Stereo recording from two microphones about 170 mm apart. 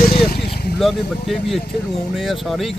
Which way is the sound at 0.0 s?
60° left (ahead or behind).